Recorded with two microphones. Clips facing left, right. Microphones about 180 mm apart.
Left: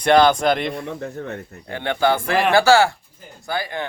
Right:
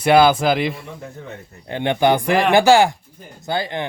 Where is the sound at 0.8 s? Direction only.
65° left (ahead or behind).